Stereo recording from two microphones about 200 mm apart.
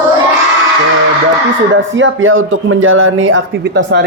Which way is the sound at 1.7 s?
70° right (ahead or behind).